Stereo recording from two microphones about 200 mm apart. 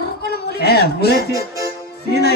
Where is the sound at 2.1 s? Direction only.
55° left (ahead or behind).